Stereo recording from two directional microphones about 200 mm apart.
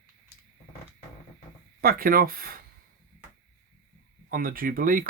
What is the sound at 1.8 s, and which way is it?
Speech, 50° right (ahead or behind).